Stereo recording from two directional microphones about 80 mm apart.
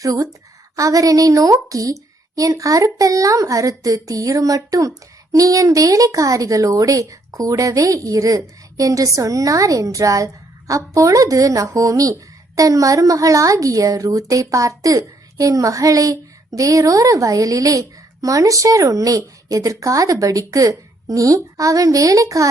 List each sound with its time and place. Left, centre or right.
0.0 s a woman's voice: right